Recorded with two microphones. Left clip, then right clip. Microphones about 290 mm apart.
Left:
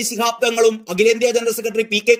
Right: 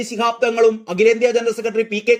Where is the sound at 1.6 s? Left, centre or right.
Left.